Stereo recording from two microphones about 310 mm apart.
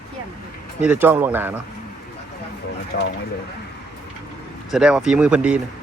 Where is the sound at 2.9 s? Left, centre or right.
Left.